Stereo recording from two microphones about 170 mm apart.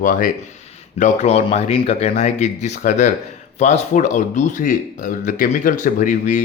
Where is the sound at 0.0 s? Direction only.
55° left (ahead or behind).